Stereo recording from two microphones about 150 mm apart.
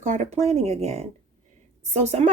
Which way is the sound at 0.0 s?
50° right (ahead or behind).